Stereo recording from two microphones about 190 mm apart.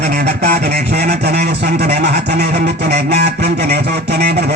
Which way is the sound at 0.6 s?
55° right (ahead or behind).